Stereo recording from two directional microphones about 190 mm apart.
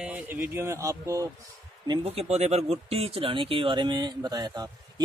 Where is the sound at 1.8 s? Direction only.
30° right (ahead or behind).